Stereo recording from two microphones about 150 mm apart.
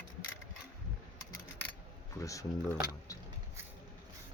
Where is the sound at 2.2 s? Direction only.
20° left (ahead or behind).